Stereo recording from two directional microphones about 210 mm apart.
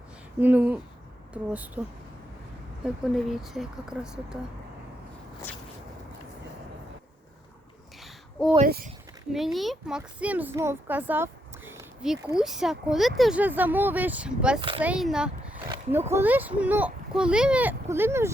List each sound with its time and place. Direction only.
0.3 s a child's voice: 10° right (ahead or behind)
2.8 s speech: centre (ahead or behind)
8.0 s a sound: centre (ahead or behind)
8.6 s speech: 40° right (ahead or behind)
9.3 s a child's voice: centre (ahead or behind)